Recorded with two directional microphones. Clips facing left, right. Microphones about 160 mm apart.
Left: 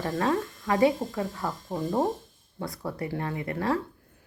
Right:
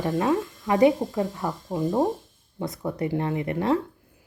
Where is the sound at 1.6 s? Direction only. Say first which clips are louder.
Right 4 dB; 5° right (ahead or behind).